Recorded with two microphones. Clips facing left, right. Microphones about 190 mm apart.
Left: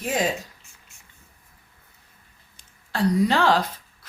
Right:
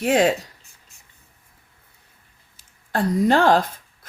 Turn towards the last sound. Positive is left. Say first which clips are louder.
# right 3 dB
turn(degrees=-50)  # may be behind; listen again after turning